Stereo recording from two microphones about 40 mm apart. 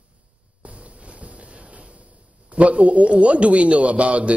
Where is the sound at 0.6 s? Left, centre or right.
Right.